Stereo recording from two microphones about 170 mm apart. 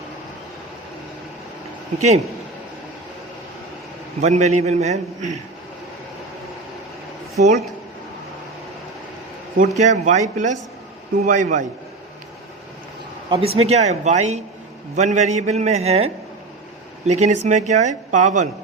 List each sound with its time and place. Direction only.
2.0 s a man's voice: 40° right (ahead or behind)
4.2 s a man's voice: 40° right (ahead or behind)
7.3 s a man's voice: 40° right (ahead or behind)
9.7 s speech: 45° right (ahead or behind)
13.3 s a man's voice: 35° right (ahead or behind)